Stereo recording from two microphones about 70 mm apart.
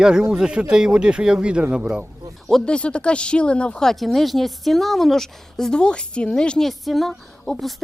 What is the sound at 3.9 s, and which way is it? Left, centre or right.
A woman's voice, centre.